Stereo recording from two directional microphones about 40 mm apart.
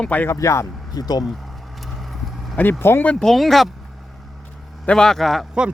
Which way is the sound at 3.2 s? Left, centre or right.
Centre.